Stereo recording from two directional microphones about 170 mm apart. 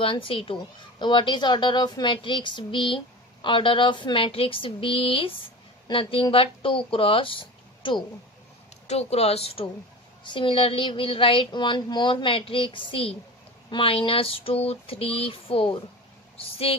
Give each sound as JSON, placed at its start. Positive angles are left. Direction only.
{"t": 0.0, "sound": "a woman's voice", "side_deg": 30}